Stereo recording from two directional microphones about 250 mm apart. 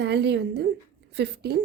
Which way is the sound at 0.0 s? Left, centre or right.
Right.